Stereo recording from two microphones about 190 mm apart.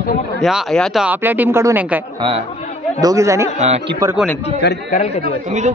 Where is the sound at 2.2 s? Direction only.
25° right (ahead or behind).